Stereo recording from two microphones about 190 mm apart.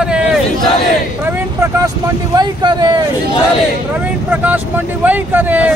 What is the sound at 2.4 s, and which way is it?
Speech, 20° right (ahead or behind).